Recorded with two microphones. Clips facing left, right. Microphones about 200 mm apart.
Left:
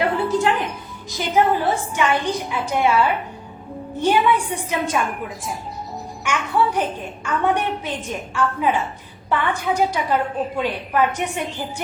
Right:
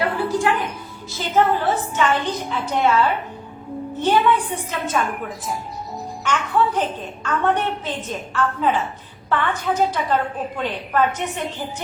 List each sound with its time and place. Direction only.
0.0 s music: 20° left (ahead or behind)
1.1 s a woman's voice: 15° left (ahead or behind)
6.2 s a woman's voice: 10° left (ahead or behind)